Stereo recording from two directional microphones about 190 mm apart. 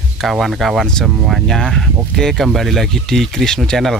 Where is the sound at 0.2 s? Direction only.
Centre (ahead or behind).